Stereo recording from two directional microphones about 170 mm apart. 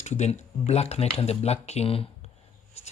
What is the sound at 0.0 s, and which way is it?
Speech, 40° left (ahead or behind).